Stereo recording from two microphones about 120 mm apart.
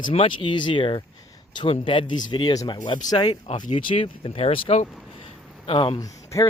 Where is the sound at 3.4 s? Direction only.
70° left (ahead or behind).